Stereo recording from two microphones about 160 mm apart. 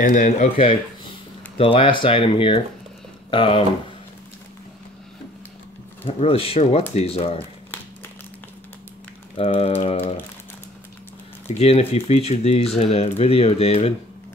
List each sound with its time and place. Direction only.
0.0 s speech: 50° left (ahead or behind)
1.6 s speech: 35° left (ahead or behind)
6.0 s speech: 35° left (ahead or behind)
9.5 s speech: 40° left (ahead or behind)
11.5 s speech: 40° left (ahead or behind)